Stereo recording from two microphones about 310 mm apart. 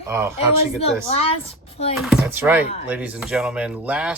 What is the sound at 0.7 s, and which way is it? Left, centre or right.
Child singing, centre.